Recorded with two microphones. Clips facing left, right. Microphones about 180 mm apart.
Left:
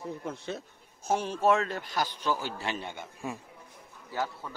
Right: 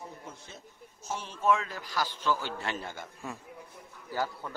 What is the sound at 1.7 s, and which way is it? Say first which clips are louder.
Speech: left 2 dB; 25° left (ahead or behind).